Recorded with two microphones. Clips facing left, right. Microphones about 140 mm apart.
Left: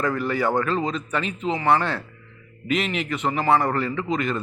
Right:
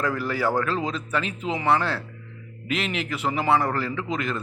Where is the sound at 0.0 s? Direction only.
5° right (ahead or behind).